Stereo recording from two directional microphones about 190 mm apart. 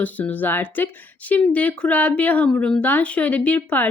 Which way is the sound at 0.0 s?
10° left (ahead or behind).